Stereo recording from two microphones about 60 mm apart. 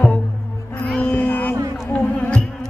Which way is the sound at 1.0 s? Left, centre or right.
Left.